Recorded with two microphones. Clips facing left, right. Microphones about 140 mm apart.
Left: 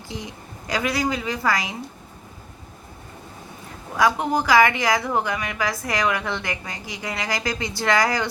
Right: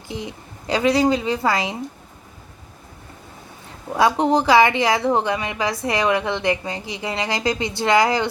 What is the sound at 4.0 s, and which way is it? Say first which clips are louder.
A woman's voice: right 4 dB; 25° right (ahead or behind).